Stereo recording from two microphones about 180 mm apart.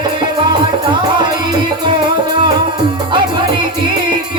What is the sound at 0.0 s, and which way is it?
Music, 25° right (ahead or behind).